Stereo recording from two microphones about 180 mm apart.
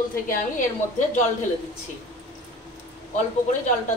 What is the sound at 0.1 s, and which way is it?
A woman's voice, 45° left (ahead or behind).